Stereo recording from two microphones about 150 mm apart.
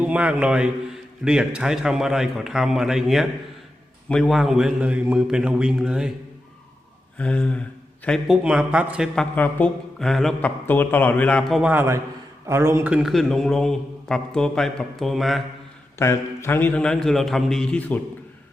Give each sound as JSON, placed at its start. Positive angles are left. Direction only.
{"t": 0.0, "sound": "a man's voice", "side_deg": -10}
{"t": 7.2, "sound": "a man's voice", "side_deg": 5}
{"t": 9.1, "sound": "a man's voice", "side_deg": 10}
{"t": 10.7, "sound": "a man's voice", "side_deg": 10}
{"t": 11.7, "sound": "a man's voice", "side_deg": -15}
{"t": 16.0, "sound": "a man's voice", "side_deg": 15}